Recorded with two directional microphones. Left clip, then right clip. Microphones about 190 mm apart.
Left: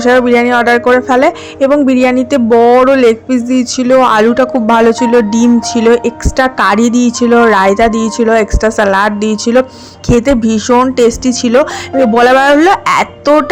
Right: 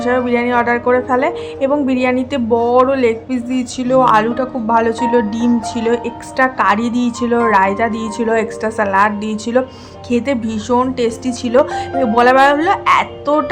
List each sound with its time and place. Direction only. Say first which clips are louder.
0.0 s speech: left 8 dB; 35° left (ahead or behind)